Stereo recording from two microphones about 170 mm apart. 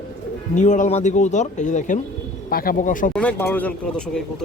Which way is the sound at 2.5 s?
60° left (ahead or behind).